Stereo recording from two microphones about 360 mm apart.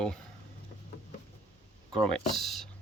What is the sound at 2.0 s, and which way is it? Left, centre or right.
Speech, centre.